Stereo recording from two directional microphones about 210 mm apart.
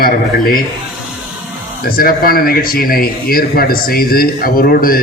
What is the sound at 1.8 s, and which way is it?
A man's voice, 45° left (ahead or behind).